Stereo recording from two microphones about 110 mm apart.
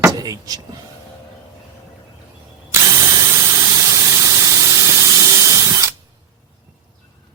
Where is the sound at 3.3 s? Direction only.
25° right (ahead or behind).